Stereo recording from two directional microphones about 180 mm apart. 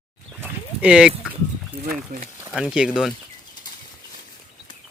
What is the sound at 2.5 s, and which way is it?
Speech, 5° right (ahead or behind).